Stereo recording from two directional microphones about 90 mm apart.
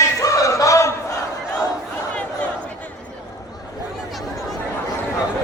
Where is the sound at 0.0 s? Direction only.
40° left (ahead or behind).